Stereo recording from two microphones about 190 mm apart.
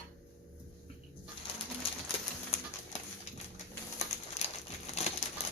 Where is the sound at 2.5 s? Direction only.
35° left (ahead or behind).